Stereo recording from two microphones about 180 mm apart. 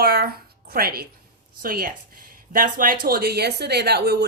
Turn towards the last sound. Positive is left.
turn(degrees=-65)  # may be behind; listen again after turning